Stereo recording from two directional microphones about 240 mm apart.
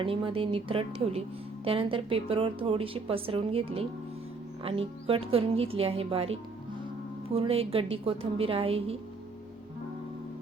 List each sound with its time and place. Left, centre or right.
0.0 s a woman's voice: right